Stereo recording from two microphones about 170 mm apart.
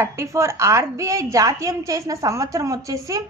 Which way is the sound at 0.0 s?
15° right (ahead or behind).